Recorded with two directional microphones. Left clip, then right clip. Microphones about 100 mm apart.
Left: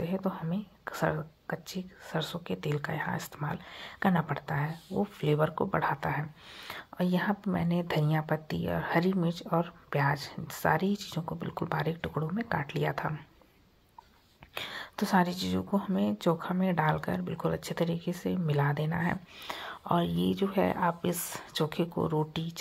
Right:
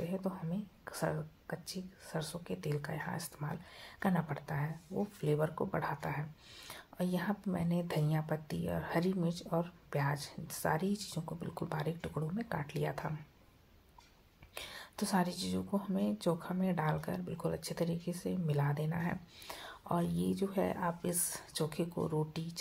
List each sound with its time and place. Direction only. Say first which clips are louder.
0.0 s speech: left 6 dB; 25° left (ahead or behind)
14.5 s speech: left 9 dB; 20° left (ahead or behind)